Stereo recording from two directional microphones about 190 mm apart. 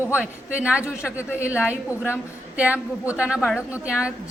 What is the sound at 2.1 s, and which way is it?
A woman's voice, 5° right (ahead or behind).